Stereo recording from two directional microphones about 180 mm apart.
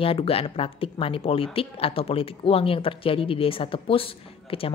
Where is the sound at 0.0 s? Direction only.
30° left (ahead or behind).